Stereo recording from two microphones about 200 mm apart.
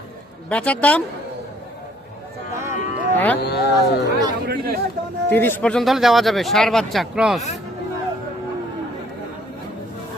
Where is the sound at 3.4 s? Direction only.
55° left (ahead or behind).